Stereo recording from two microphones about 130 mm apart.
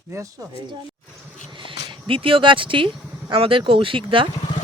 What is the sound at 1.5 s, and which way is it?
Speech, 40° right (ahead or behind).